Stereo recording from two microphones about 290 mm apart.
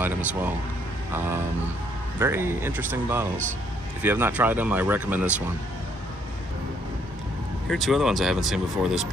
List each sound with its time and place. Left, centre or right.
0.0 s speech: centre
2.1 s speech: centre
7.7 s speech: centre